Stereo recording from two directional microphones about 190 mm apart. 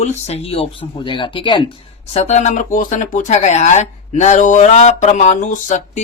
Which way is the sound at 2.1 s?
35° left (ahead or behind).